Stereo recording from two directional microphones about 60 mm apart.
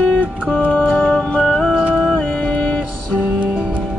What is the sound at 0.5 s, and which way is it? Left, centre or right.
Music, centre.